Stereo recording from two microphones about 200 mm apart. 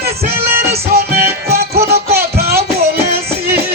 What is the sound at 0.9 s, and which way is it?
Music, 50° right (ahead or behind).